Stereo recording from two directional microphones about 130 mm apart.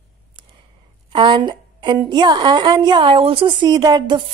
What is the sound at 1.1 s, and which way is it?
A woman's voice, 35° right (ahead or behind).